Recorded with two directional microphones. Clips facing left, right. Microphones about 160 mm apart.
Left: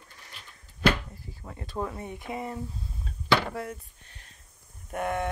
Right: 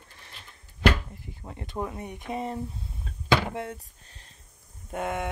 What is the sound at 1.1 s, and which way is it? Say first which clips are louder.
Speech: right 1 dB; 20° right (ahead or behind).